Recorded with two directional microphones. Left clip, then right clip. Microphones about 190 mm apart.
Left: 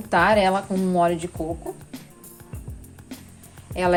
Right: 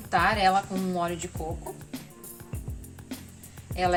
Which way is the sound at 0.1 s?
40° left (ahead or behind).